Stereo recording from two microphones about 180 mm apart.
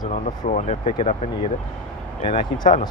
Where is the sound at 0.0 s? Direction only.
45° left (ahead or behind).